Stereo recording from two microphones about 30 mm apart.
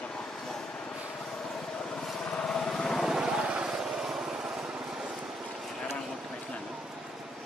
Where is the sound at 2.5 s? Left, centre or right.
Centre.